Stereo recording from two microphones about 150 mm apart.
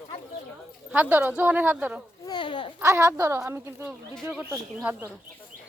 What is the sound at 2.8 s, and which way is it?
A woman's voice, 20° right (ahead or behind).